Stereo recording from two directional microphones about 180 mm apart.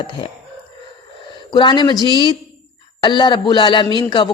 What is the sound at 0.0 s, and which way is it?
Speech, 25° left (ahead or behind).